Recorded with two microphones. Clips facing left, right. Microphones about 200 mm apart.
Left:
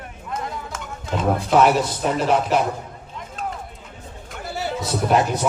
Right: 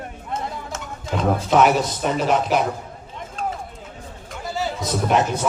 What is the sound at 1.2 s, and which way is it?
A man's voice, 5° left (ahead or behind).